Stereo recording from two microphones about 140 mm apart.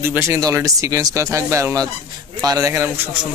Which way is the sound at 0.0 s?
15° right (ahead or behind).